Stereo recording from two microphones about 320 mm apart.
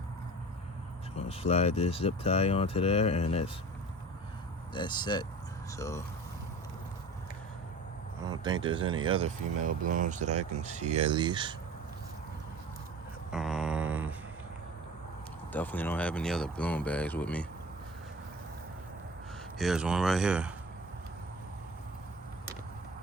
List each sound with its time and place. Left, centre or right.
1.1 s speech: centre
4.7 s speech: centre
8.2 s speech: centre
13.3 s a sound: centre
15.5 s speech: centre
19.5 s speech: centre